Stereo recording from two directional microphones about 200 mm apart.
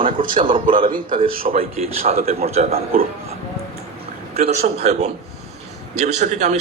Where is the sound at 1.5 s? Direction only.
30° right (ahead or behind).